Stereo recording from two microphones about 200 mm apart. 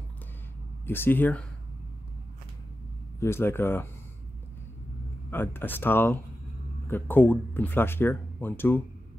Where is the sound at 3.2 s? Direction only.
10° left (ahead or behind).